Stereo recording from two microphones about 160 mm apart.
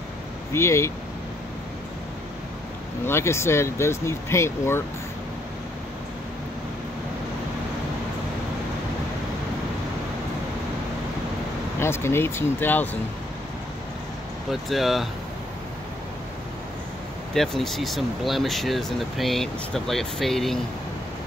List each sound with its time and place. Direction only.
0.5 s speech: 15° left (ahead or behind)
3.1 s speech: 15° left (ahead or behind)
11.8 s speech: 15° left (ahead or behind)
14.5 s speech: centre (ahead or behind)
17.3 s speech: centre (ahead or behind)